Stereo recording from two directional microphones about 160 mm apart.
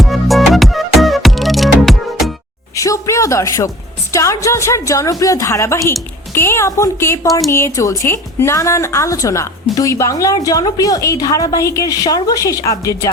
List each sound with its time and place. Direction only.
0.0 s music: centre (ahead or behind)
2.7 s a sound: 20° left (ahead or behind)
4.1 s speech: 20° left (ahead or behind)